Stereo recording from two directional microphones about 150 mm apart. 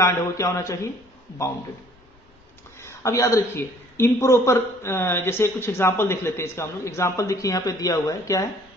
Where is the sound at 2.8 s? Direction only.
20° left (ahead or behind).